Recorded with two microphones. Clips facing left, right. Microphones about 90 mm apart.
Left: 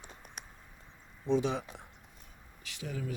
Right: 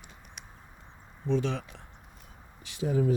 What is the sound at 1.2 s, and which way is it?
Speech, 15° left (ahead or behind).